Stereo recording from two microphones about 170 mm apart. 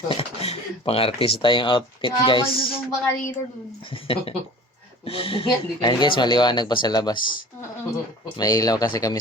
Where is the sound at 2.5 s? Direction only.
60° left (ahead or behind).